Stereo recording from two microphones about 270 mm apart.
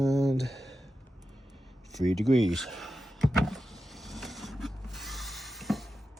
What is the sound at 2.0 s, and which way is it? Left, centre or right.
Power windows, centre.